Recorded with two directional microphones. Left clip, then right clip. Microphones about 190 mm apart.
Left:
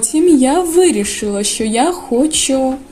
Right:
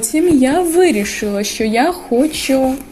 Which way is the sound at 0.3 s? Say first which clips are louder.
Left 1 dB; 15° left (ahead or behind).